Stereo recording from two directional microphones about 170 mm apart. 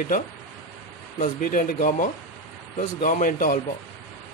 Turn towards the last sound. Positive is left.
turn(degrees=50)  # may be behind; listen again after turning